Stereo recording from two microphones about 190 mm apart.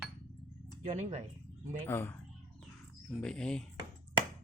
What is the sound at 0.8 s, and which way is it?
Speech, 35° right (ahead or behind).